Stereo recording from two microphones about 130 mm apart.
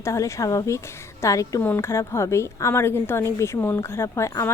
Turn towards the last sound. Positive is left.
turn(degrees=20)  # may be behind; listen again after turning